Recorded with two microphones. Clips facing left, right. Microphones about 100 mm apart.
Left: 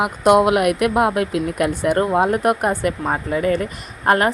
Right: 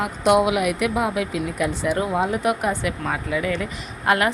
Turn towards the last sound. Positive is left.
turn(degrees=40)  # may be behind; listen again after turning